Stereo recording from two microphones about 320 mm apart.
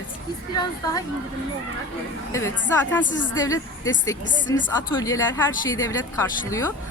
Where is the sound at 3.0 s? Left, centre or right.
Left.